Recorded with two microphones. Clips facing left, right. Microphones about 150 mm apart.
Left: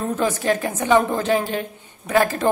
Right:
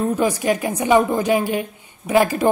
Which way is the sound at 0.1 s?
15° right (ahead or behind).